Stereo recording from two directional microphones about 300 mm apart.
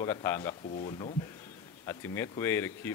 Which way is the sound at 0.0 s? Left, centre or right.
Centre.